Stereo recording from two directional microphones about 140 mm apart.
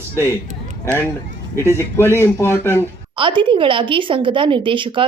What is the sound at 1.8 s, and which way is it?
A man's voice, 20° left (ahead or behind).